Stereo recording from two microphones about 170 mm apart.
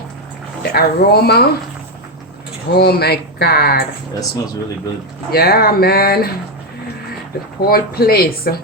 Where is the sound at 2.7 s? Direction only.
70° left (ahead or behind).